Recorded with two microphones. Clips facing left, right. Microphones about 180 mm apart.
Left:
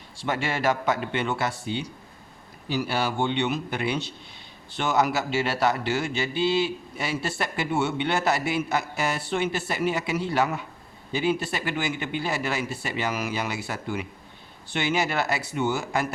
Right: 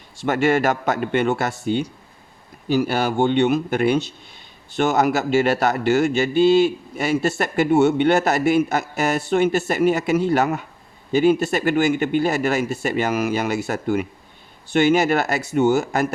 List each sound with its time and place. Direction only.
0.2 s speech: 50° right (ahead or behind)